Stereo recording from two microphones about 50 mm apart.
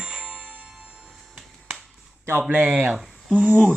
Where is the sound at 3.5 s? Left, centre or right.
Centre.